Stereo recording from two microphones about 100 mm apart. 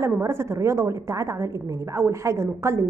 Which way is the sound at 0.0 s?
30° right (ahead or behind).